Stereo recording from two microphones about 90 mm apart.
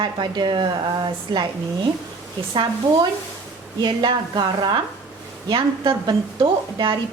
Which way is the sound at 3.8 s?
55° right (ahead or behind).